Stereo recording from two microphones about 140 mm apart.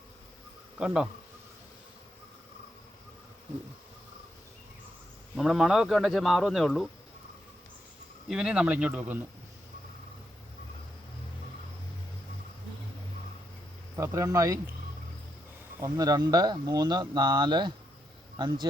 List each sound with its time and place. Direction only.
0.8 s speech: 5° right (ahead or behind)
5.4 s speech: 5° right (ahead or behind)
8.3 s speech: 5° right (ahead or behind)
13.9 s speech: 20° right (ahead or behind)
15.8 s speech: 25° right (ahead or behind)